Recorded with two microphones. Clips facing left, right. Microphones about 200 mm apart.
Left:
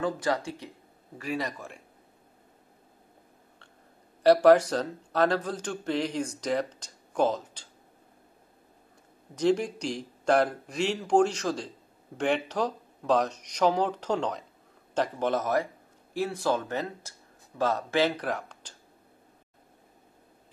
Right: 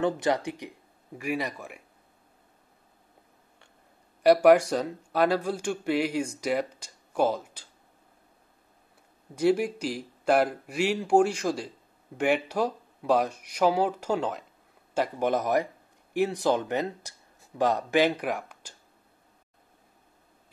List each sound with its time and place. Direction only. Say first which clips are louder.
0.0 s speech: right 3 dB; 20° right (ahead or behind)
4.2 s speech: even; 10° right (ahead or behind)
9.3 s speech: right 1 dB; 10° right (ahead or behind)